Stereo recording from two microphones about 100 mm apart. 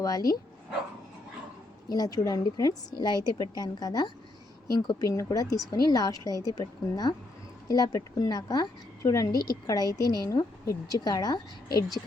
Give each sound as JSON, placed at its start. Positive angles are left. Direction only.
{"t": 0.0, "sound": "a woman's voice", "side_deg": 40}
{"t": 1.9, "sound": "a woman's voice", "side_deg": 40}